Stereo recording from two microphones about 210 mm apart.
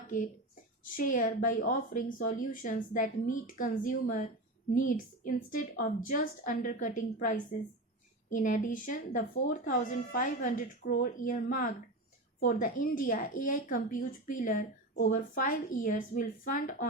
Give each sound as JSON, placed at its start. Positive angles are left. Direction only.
{"t": 0.9, "sound": "a woman's voice", "side_deg": 40}
{"t": 12.4, "sound": "a woman's voice", "side_deg": 40}